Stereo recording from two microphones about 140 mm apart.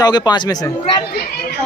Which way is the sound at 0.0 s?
30° left (ahead or behind).